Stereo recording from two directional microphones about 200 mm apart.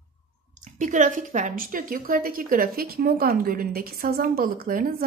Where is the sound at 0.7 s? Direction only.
40° right (ahead or behind).